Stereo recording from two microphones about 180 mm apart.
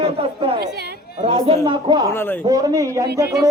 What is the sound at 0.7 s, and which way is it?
Speech, 65° right (ahead or behind).